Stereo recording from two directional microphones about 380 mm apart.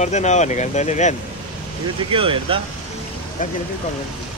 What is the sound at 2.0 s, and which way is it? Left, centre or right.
Speech, centre.